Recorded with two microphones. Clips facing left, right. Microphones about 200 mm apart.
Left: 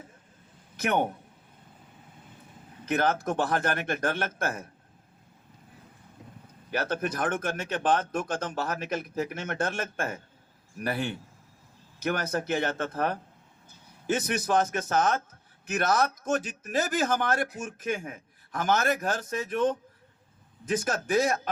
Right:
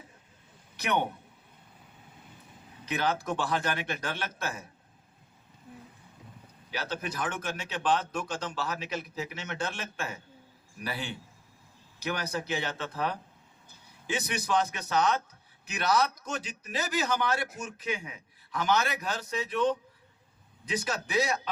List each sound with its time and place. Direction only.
0.8 s a man's voice: 50° left (ahead or behind)
2.8 s speech: 50° left (ahead or behind)
6.7 s speech: 50° left (ahead or behind)